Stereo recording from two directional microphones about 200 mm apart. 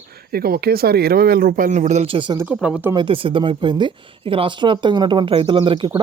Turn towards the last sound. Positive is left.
turn(degrees=-25)  # may be behind; listen again after turning